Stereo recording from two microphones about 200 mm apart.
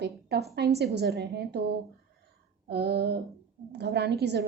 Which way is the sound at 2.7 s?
55° right (ahead or behind).